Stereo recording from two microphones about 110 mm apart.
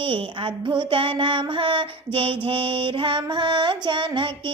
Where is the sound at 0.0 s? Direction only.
50° right (ahead or behind).